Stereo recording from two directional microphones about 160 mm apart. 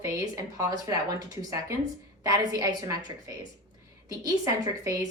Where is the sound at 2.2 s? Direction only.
20° right (ahead or behind).